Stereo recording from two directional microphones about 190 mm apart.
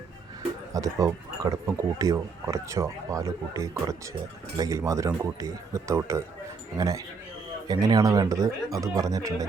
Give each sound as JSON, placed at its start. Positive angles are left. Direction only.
{"t": 0.7, "sound": "speech", "side_deg": -15}